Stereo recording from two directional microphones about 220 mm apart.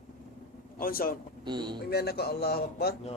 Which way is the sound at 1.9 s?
45° left (ahead or behind).